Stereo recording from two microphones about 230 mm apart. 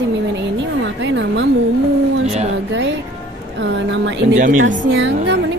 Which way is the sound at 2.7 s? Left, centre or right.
Right.